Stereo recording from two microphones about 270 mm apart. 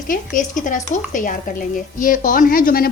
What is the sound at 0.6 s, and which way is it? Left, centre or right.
A woman's voice, left.